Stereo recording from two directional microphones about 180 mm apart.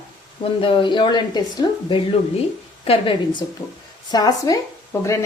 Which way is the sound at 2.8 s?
30° left (ahead or behind).